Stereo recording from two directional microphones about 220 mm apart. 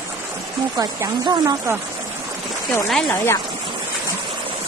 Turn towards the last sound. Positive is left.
turn(degrees=5)  # may be behind; listen again after turning